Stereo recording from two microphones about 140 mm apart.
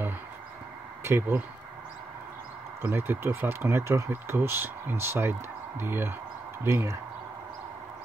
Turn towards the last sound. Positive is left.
turn(degrees=-20)  # may be behind; listen again after turning